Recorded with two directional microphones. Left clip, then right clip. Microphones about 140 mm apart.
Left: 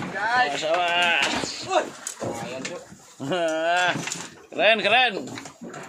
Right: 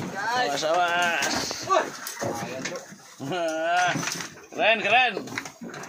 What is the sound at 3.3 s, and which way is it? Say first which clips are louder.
Speech: left 2 dB; 45° left (ahead or behind).